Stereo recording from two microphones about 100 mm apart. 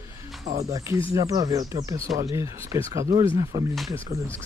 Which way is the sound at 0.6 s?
30° right (ahead or behind).